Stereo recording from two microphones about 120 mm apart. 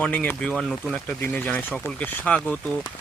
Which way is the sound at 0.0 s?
10° left (ahead or behind).